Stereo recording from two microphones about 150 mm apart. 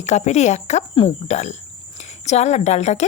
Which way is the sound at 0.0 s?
50° left (ahead or behind).